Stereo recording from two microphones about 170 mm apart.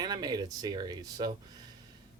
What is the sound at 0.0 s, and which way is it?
Speech, 25° right (ahead or behind).